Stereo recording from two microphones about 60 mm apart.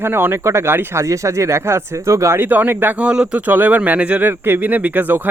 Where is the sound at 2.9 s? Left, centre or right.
Centre.